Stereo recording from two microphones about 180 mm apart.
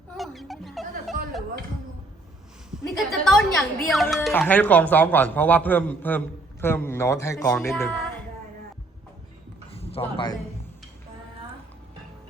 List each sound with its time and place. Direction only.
0.2 s music: centre (ahead or behind)
2.6 s a woman's voice: centre (ahead or behind)
9.7 s a sound: 30° left (ahead or behind)